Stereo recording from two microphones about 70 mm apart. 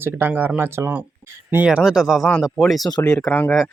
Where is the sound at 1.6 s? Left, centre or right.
Centre.